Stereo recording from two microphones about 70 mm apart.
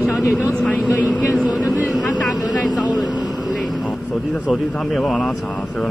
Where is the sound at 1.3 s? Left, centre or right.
Centre.